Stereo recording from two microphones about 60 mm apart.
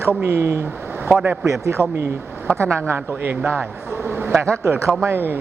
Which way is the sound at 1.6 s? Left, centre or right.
Right.